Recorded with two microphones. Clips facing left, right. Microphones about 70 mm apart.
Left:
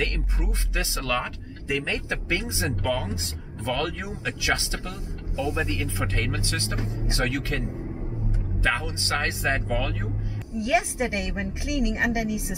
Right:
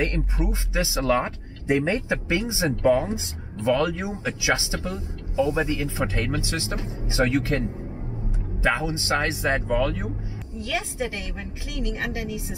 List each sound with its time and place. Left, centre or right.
0.0 s speech: centre
2.0 s speech: centre
8.6 s speech: centre
10.6 s a woman's voice: left